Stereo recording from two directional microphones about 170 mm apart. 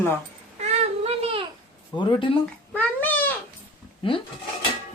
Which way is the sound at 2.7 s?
10° left (ahead or behind).